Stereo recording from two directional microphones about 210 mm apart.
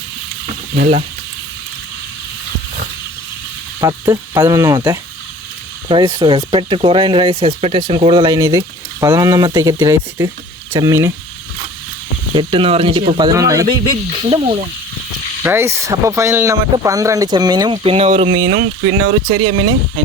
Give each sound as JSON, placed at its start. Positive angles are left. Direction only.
{"t": 0.8, "sound": "speech", "side_deg": -35}
{"t": 3.8, "sound": "speech", "side_deg": -15}
{"t": 12.3, "sound": "speech", "side_deg": -20}
{"t": 14.3, "sound": "speech", "side_deg": -25}
{"t": 15.4, "sound": "speech", "side_deg": -10}